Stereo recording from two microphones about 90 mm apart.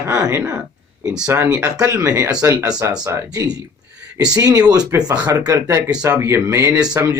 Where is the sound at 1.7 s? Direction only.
35° right (ahead or behind).